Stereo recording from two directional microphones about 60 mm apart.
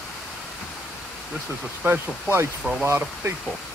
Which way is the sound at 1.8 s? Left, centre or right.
Right.